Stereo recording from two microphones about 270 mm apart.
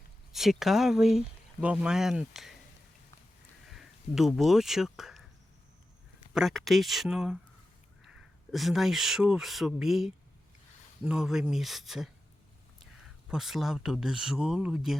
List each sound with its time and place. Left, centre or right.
0.3 s speech: centre
3.7 s speech: centre
6.3 s speech: centre
8.5 s speech: centre